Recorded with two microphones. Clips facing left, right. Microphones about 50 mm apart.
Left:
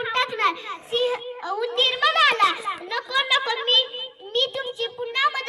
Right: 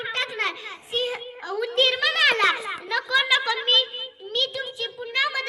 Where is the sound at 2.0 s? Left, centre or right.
Centre.